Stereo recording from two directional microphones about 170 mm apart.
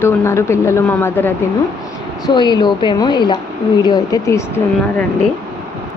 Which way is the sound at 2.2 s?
25° left (ahead or behind).